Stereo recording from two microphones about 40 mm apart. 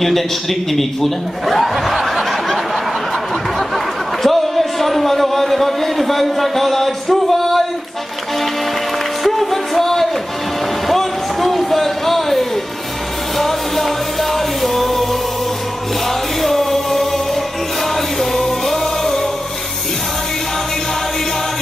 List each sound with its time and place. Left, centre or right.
0.0 s a man's voice: centre
2.0 s a sound: centre
9.2 s music: centre
10.9 s a sound: centre
13.4 s music: centre
16.4 s music: centre
18.3 s music: centre